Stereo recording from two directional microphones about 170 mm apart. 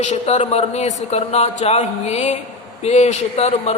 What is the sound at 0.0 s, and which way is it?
Speech, 45° left (ahead or behind).